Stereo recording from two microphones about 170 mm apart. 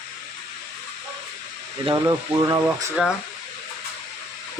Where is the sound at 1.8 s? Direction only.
25° right (ahead or behind).